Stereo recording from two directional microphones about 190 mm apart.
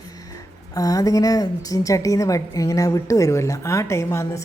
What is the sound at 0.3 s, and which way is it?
A woman's voice, 20° left (ahead or behind).